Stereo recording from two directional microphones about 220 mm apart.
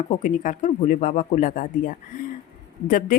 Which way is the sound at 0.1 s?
35° left (ahead or behind).